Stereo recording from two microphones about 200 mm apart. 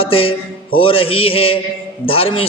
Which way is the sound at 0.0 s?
30° left (ahead or behind).